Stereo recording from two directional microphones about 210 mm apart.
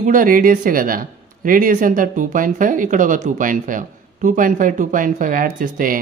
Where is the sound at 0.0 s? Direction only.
40° right (ahead or behind).